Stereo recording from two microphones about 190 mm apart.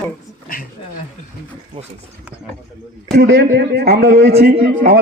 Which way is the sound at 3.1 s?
65° right (ahead or behind).